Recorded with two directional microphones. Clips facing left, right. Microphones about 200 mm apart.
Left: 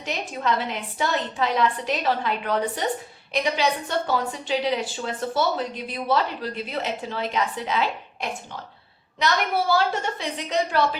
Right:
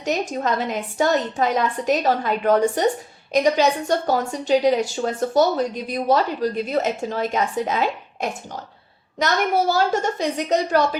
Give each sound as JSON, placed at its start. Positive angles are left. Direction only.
{"t": 0.0, "sound": "a woman's voice", "side_deg": -45}